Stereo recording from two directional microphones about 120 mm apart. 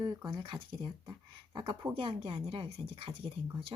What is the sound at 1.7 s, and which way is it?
A woman's voice, 50° right (ahead or behind).